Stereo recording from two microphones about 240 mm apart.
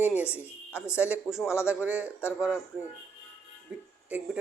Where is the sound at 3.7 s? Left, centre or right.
Centre.